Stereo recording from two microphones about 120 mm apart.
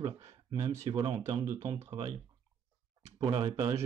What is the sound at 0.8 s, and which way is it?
Speech, 40° right (ahead or behind).